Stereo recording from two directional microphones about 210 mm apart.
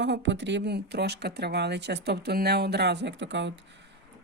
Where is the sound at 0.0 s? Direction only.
55° right (ahead or behind).